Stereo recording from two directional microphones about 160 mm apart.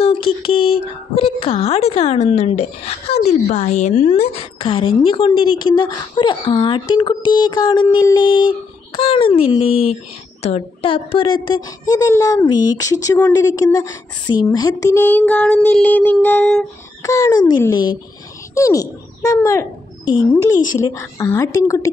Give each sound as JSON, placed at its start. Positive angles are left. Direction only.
{"t": 0.0, "sound": "speech", "side_deg": 35}
{"t": 13.7, "sound": "speech", "side_deg": 25}
{"t": 14.5, "sound": "a sound", "side_deg": 20}
{"t": 17.0, "sound": "a child's voice", "side_deg": 20}
{"t": 20.5, "sound": "speech", "side_deg": 55}
{"t": 20.8, "sound": "speech", "side_deg": 20}